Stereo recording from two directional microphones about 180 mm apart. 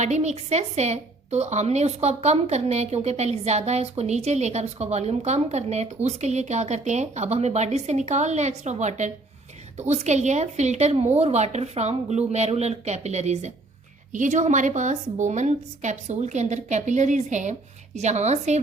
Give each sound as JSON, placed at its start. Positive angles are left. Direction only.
{"t": 0.0, "sound": "a woman's voice", "side_deg": -40}